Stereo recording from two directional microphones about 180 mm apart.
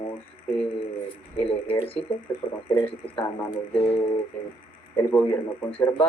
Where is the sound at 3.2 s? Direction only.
20° left (ahead or behind).